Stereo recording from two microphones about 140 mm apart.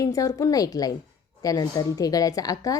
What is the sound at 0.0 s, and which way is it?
A woman's voice, 25° left (ahead or behind).